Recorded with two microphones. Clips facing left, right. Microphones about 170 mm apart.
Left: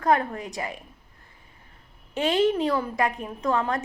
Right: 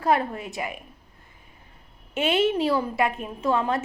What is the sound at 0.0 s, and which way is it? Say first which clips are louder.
Speech: even; 25° right (ahead or behind).